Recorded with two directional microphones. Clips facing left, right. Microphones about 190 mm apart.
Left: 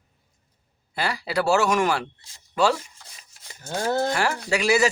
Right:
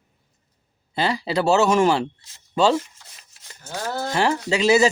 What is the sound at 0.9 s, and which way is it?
Speech, 25° right (ahead or behind).